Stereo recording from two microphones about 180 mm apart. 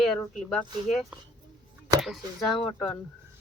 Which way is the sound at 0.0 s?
Centre (ahead or behind).